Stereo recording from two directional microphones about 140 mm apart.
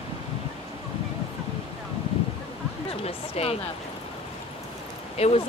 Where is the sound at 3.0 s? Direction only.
45° left (ahead or behind).